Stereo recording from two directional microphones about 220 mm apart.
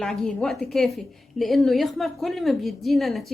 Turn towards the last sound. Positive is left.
turn(degrees=0)  # may be behind; listen again after turning